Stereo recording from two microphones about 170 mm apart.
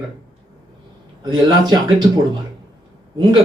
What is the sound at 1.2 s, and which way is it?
Speech, 25° right (ahead or behind).